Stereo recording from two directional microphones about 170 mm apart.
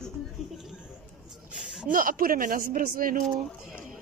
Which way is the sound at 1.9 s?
55° right (ahead or behind).